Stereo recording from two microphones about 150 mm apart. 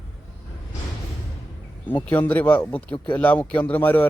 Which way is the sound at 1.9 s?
10° left (ahead or behind).